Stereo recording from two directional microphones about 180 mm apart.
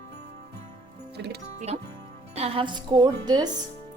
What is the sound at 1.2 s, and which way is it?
Speech, 70° right (ahead or behind).